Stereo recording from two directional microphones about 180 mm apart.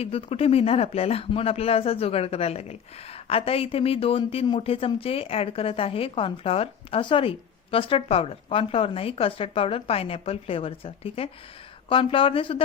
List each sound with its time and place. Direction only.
0.0 s speech: 30° left (ahead or behind)